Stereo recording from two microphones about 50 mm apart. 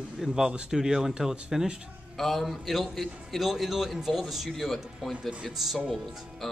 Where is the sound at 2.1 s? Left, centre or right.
Centre.